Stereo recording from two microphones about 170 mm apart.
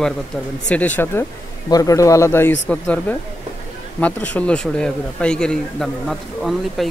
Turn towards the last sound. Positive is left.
turn(degrees=0)  # may be behind; listen again after turning